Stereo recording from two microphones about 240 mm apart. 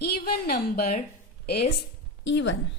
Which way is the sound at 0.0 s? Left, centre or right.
Left.